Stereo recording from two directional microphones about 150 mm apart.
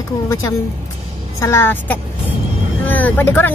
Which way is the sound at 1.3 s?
20° left (ahead or behind).